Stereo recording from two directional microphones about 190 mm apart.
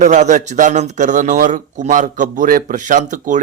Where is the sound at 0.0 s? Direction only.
40° right (ahead or behind).